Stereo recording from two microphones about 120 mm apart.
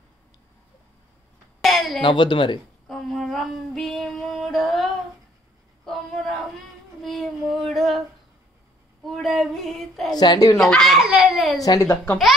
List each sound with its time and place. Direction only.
1.6 s a sound: centre (ahead or behind)
2.0 s speech: 40° left (ahead or behind)
2.9 s female singing: 5° left (ahead or behind)
5.9 s a sound: centre (ahead or behind)
9.0 s female singing: centre (ahead or behind)
10.1 s speech: 35° left (ahead or behind)
10.6 s a child's voice: 5° left (ahead or behind)
11.0 s baby cry: 5° right (ahead or behind)
11.8 s a child's voice: 20° left (ahead or behind)